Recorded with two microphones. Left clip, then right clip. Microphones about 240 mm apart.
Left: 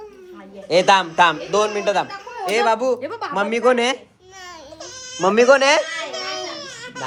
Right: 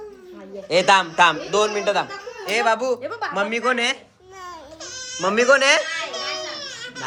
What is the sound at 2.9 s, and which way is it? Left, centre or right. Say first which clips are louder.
Speech: even; left.